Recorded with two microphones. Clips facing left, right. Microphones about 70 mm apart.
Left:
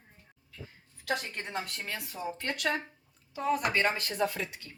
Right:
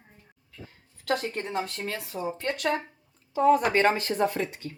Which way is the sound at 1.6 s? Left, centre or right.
Right.